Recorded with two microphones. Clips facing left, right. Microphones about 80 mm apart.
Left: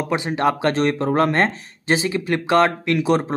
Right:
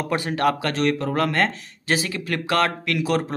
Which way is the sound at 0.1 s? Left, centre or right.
Left.